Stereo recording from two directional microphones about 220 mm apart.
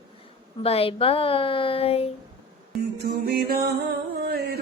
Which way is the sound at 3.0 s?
45° right (ahead or behind).